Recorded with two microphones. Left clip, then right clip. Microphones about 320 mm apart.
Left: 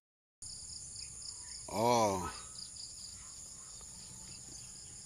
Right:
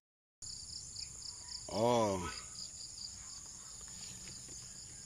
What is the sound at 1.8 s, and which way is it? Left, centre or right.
Cricket, centre.